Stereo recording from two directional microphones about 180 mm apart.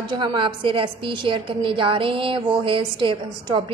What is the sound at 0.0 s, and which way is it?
A woman's voice, 25° right (ahead or behind).